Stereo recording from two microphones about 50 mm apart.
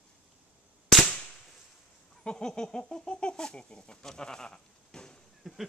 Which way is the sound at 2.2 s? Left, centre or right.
Centre.